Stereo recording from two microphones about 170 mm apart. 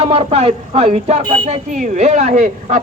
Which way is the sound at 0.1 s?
35° right (ahead or behind).